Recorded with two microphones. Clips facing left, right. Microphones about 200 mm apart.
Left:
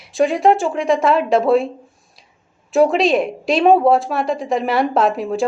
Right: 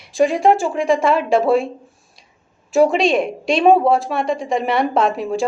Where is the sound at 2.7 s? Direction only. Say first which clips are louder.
Even; centre (ahead or behind).